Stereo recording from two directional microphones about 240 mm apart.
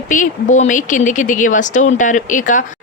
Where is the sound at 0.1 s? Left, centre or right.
Left.